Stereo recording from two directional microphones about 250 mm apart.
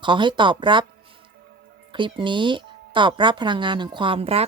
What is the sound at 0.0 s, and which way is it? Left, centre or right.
Speech, centre.